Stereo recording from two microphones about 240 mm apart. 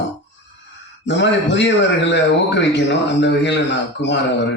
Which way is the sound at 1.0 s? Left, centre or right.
Left.